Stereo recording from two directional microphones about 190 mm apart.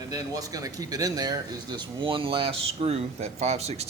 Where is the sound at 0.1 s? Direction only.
20° right (ahead or behind).